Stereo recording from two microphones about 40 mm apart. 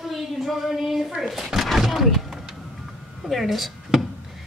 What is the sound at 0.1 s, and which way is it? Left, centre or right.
A woman's voice, centre.